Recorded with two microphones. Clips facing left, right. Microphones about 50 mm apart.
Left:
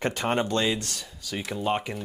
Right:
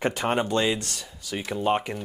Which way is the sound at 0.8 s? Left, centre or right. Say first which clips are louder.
Even; right.